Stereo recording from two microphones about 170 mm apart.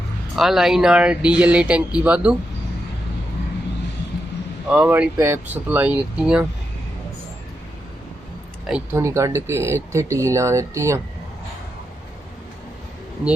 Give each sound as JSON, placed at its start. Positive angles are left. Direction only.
{"t": 0.3, "sound": "speech", "side_deg": 0}
{"t": 4.7, "sound": "speech", "side_deg": -5}
{"t": 8.6, "sound": "speech", "side_deg": -5}
{"t": 9.0, "sound": "speech", "side_deg": -20}